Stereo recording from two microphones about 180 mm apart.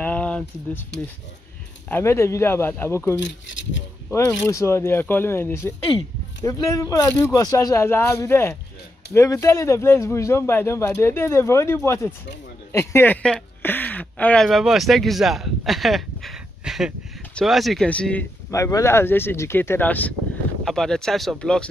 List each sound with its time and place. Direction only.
0.0 s a sound: 5° left (ahead or behind)
1.9 s speech: 15° left (ahead or behind)
4.5 s speech: 15° left (ahead or behind)